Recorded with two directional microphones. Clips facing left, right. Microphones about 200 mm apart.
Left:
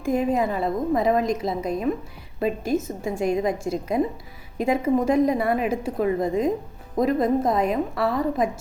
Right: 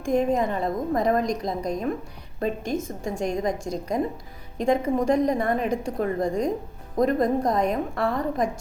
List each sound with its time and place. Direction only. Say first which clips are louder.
0.0 s a woman's voice: even; 5° left (ahead or behind)